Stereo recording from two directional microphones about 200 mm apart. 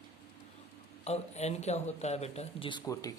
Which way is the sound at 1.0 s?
35° left (ahead or behind).